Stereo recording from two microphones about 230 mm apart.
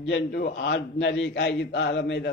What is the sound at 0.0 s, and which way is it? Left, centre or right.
A man's voice, left.